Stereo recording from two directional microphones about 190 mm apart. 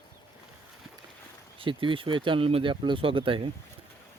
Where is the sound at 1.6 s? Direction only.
25° right (ahead or behind).